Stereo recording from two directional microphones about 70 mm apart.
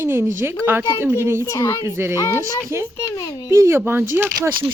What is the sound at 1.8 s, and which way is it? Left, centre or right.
Speech, right.